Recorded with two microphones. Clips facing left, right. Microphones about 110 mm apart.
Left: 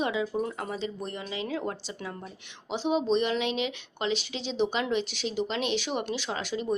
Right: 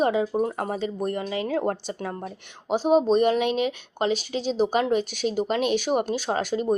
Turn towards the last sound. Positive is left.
turn(degrees=-45)  # may be behind; listen again after turning